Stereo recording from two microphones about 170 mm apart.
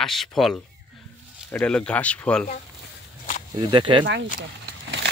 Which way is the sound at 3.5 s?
25° right (ahead or behind).